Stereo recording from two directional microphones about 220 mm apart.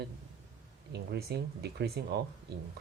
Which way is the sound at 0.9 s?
50° right (ahead or behind).